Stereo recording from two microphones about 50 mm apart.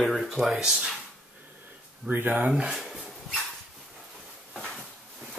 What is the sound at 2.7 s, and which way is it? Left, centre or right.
Speech, centre.